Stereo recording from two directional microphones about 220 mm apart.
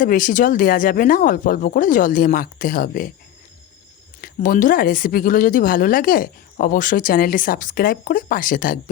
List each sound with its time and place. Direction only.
0.0 s speech: 40° left (ahead or behind)
4.2 s speech: 40° left (ahead or behind)